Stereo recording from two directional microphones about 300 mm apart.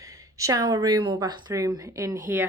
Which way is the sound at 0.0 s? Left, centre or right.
Centre.